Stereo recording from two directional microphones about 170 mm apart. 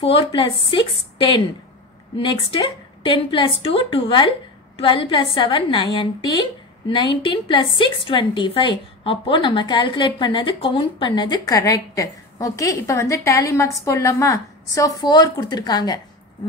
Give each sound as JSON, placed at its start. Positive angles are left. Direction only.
{"t": 2.1, "sound": "a woman's voice", "side_deg": 30}